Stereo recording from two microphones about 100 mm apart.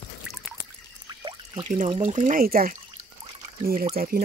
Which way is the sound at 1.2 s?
55° right (ahead or behind).